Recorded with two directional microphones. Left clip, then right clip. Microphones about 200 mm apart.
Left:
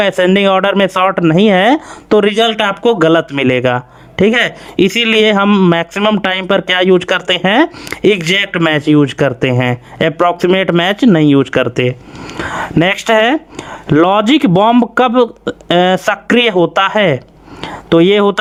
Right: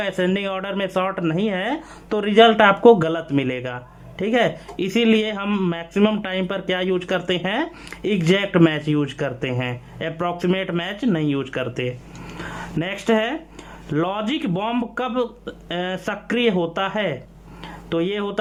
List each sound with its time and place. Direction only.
0.0 s speech: 45° left (ahead or behind)
5.5 s speech: 35° left (ahead or behind)
5.7 s speech: 45° left (ahead or behind)